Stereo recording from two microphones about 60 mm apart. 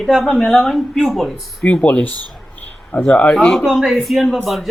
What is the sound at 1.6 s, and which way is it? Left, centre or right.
Speech, left.